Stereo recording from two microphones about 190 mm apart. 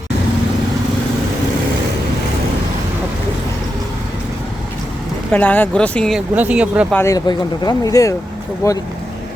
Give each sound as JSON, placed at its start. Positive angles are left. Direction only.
{"t": 5.3, "sound": "speech", "side_deg": 10}
{"t": 6.9, "sound": "speech", "side_deg": 15}